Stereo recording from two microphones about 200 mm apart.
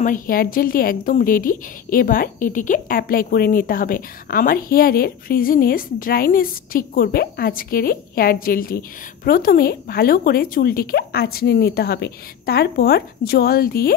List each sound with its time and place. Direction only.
0.0 s a woman's voice: 45° left (ahead or behind)